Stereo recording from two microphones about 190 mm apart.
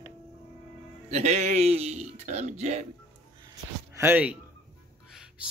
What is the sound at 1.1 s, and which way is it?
Speech, 35° right (ahead or behind).